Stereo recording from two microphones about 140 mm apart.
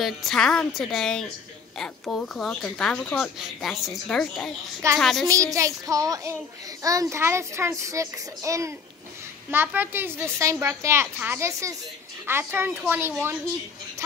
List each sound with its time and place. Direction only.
0.0 s speech: centre (ahead or behind)
5.3 s a child's voice: 25° right (ahead or behind)